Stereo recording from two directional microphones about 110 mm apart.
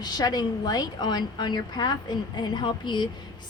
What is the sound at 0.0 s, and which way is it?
Speech, 40° left (ahead or behind).